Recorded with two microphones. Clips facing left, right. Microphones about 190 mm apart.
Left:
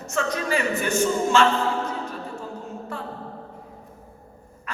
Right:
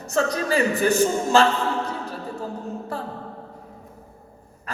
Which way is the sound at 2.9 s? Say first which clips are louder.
Right 3 dB; 35° right (ahead or behind).